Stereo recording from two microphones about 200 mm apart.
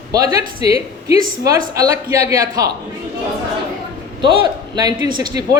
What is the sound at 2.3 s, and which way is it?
Speech, 15° right (ahead or behind).